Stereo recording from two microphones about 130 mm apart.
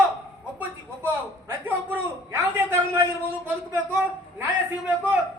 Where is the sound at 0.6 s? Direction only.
15° right (ahead or behind).